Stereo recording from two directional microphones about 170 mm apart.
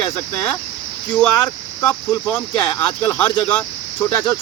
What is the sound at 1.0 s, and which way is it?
Speech, 10° left (ahead or behind).